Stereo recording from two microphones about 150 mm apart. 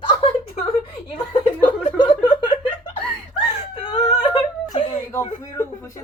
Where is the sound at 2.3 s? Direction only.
35° left (ahead or behind).